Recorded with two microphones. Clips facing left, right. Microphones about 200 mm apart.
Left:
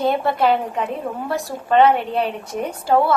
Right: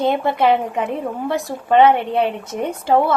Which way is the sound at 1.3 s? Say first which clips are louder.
Right 3 dB; 15° right (ahead or behind).